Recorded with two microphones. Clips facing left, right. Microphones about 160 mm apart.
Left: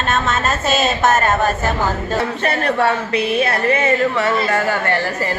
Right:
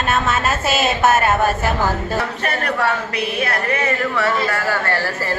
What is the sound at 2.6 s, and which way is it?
A woman's voice, 25° left (ahead or behind).